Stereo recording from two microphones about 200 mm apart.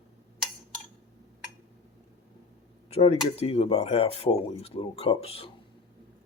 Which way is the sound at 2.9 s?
30° left (ahead or behind).